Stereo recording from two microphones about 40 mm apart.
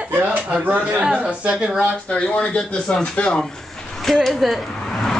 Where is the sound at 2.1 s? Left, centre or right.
Left.